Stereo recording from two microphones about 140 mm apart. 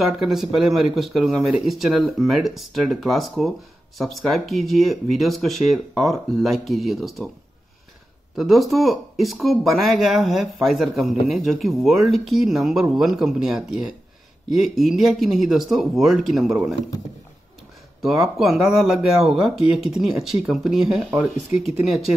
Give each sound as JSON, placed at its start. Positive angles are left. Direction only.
{"t": 0.0, "sound": "speech", "side_deg": 0}
{"t": 8.4, "sound": "speech", "side_deg": 0}
{"t": 18.0, "sound": "speech", "side_deg": 0}